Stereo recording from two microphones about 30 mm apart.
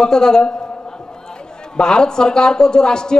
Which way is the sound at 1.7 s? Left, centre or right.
Left.